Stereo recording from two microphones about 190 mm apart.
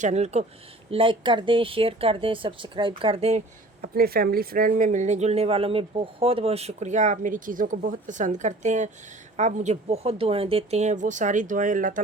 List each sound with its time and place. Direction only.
0.0 s speech: 35° right (ahead or behind)
3.8 s speech: 55° right (ahead or behind)